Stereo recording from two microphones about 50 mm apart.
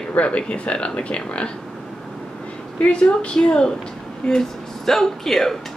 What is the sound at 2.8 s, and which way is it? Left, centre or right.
Speech, left.